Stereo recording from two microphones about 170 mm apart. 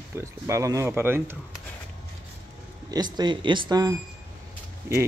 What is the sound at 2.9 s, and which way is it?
Speech, 25° right (ahead or behind).